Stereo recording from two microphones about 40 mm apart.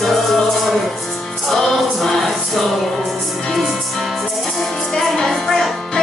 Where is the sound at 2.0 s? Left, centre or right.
Centre.